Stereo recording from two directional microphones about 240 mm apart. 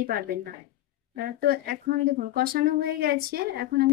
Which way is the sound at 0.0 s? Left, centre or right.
Right.